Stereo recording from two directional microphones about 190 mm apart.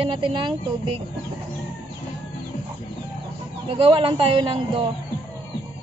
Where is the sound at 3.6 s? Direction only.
30° right (ahead or behind).